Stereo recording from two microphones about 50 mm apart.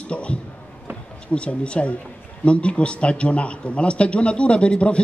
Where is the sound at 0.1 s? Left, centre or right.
Left.